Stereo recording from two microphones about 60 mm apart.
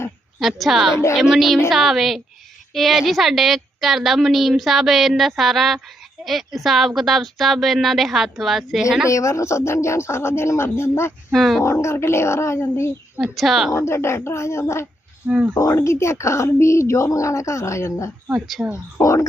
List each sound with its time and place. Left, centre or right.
0.3 s a woman's voice: centre
1.4 s a woman's voice: centre
8.8 s speech: centre
9.0 s speech: left
11.3 s a woman's voice: centre
11.6 s speech: left
13.1 s a woman's voice: centre
13.7 s speech: left
18.6 s speech: right